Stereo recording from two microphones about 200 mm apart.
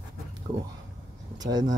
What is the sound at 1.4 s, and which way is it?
Speech, 20° right (ahead or behind).